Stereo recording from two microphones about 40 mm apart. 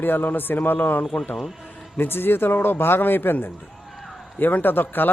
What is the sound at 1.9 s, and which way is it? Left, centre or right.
Speech, left.